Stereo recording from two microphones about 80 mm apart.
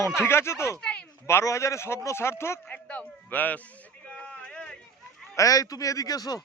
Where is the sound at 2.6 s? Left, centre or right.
Centre.